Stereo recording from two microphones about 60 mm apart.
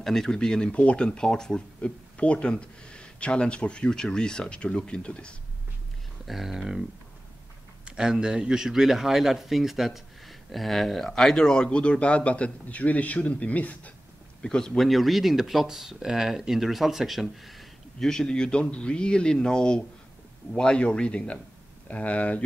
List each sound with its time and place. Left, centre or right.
0.0 s speech: centre
6.2 s a man's voice: centre
7.8 s a man's voice: centre; by 13.9 s left
14.4 s a man's voice: centre
17.9 s speech: centre